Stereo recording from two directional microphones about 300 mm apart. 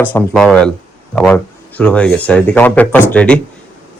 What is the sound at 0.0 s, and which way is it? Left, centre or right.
Speech, centre.